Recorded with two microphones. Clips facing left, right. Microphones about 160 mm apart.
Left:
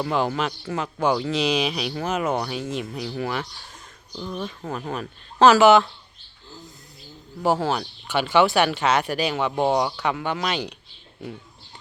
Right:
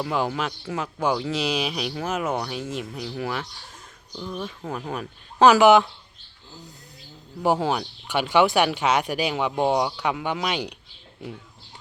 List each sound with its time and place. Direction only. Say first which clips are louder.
0.0 s speech: left 2 dB; 5° right (ahead or behind)
4.4 s speech: left 1 dB; 5° right (ahead or behind)
7.4 s speech: even; 15° right (ahead or behind)